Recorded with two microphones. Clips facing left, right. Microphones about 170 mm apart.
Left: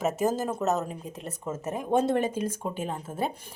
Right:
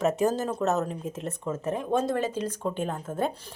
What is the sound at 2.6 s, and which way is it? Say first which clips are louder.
Speech: right 3 dB; 5° left (ahead or behind).